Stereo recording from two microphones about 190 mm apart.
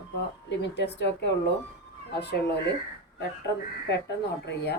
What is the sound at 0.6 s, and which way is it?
A woman's voice, 65° left (ahead or behind).